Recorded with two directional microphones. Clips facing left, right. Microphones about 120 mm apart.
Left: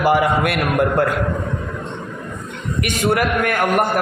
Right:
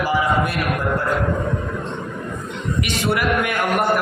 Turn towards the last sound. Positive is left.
turn(degrees=50)  # may be behind; listen again after turning